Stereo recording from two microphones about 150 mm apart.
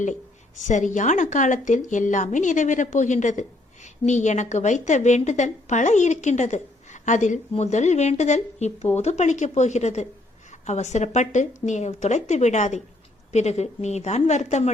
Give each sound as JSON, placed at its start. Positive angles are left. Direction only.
{"t": 0.6, "sound": "a woman's voice", "side_deg": 55}